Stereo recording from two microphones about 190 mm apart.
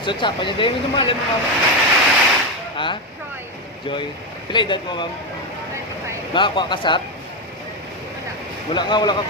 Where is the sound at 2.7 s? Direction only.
25° left (ahead or behind).